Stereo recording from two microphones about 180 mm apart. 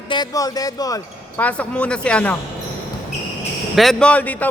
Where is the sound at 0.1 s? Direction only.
20° left (ahead or behind).